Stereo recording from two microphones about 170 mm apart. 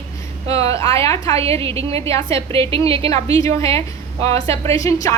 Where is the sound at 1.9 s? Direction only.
35° right (ahead or behind).